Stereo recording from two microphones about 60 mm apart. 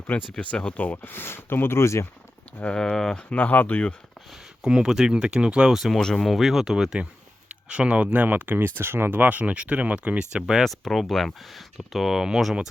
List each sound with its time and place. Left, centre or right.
0.3 s speech: centre
1.0 s speech: left
2.7 s speech: centre
3.2 s speech: left
4.3 s speech: centre
6.0 s speech: centre
7.0 s speech: centre
8.8 s speech: right; by 12.5 s centre